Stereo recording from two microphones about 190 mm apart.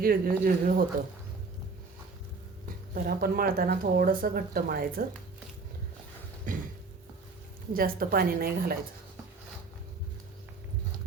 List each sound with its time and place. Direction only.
0.0 s speech: 50° right (ahead or behind)
2.9 s speech: 50° right (ahead or behind)
7.7 s speech: 50° right (ahead or behind)